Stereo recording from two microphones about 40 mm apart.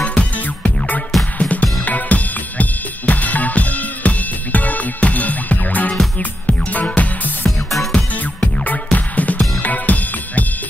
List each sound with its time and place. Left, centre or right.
0.0 s music: left
1.4 s drum kit: left
6.1 s music: left
7.4 s music: centre
8.1 s music: left